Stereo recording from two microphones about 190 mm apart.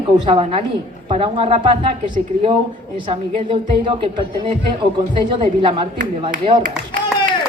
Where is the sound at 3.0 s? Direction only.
25° right (ahead or behind).